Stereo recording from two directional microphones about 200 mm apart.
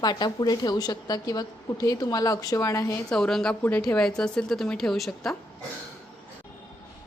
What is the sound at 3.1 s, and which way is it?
A woman's voice, 5° left (ahead or behind).